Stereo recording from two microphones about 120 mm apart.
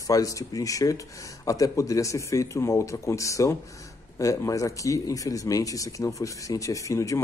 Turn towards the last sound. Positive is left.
turn(degrees=25)  # may be behind; listen again after turning